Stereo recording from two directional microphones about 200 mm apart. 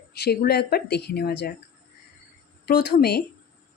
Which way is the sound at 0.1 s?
55° left (ahead or behind).